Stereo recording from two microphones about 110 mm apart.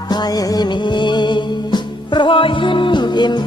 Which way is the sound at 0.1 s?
40° left (ahead or behind).